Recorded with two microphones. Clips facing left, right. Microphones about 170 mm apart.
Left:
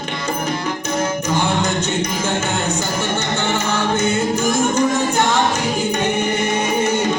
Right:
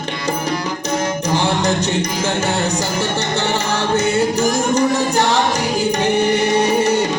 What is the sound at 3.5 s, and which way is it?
Music, 35° right (ahead or behind).